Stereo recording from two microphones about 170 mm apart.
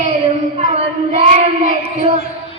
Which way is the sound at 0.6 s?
45° right (ahead or behind).